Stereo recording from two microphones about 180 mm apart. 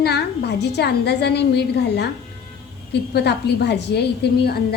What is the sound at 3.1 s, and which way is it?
A woman's voice, 65° left (ahead or behind).